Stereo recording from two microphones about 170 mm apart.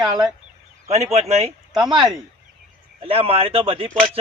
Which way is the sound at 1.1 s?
40° right (ahead or behind).